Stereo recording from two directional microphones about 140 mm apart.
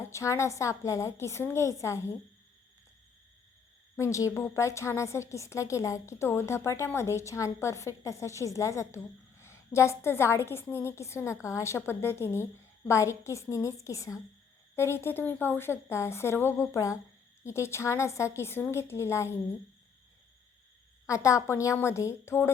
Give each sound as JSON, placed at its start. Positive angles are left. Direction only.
{"t": 0.1, "sound": "a woman's voice", "side_deg": 20}
{"t": 3.9, "sound": "a woman's voice", "side_deg": 20}
{"t": 21.1, "sound": "a woman's voice", "side_deg": 20}